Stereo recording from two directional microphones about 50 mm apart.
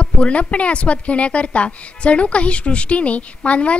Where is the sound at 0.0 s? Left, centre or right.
Left.